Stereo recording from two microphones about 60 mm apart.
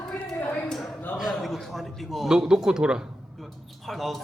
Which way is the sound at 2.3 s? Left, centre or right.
Centre.